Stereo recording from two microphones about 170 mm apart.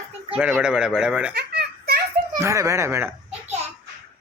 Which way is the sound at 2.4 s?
15° right (ahead or behind).